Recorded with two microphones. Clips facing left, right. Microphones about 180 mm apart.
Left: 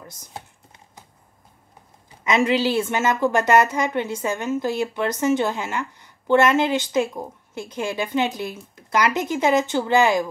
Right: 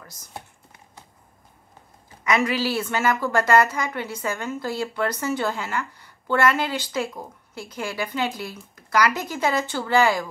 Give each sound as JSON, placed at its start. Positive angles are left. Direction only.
{"t": 2.2, "sound": "a woman's voice", "side_deg": 25}